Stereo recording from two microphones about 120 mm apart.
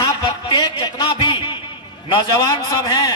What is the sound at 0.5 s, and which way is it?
Speech, 40° left (ahead or behind).